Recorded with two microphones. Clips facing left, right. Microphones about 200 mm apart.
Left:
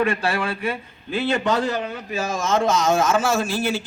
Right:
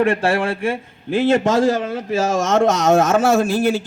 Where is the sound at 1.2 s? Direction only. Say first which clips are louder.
Right 6 dB; 90° right.